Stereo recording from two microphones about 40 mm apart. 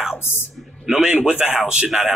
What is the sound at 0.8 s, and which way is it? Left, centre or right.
A man's voice, centre.